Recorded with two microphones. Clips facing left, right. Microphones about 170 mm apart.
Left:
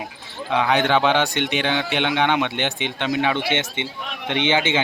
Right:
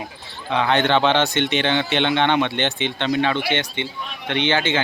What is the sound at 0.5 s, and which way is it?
Speech, 5° left (ahead or behind).